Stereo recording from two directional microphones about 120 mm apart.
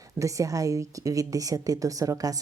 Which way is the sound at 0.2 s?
25° right (ahead or behind).